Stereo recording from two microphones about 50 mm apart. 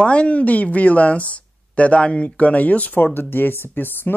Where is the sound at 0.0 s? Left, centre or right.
Left.